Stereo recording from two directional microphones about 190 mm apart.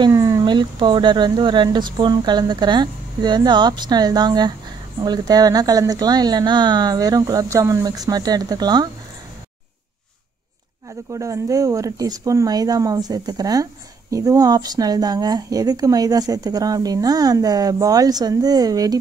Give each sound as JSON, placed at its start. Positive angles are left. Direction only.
{"t": 0.0, "sound": "a woman's voice", "side_deg": -20}
{"t": 11.1, "sound": "a woman's voice", "side_deg": -15}